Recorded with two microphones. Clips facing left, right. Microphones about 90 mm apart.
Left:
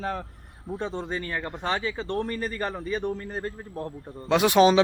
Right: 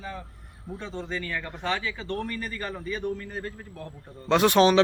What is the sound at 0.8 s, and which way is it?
Speech, 20° left (ahead or behind).